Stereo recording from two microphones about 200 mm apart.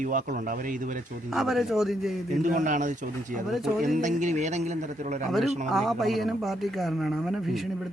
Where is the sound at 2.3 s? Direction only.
40° right (ahead or behind).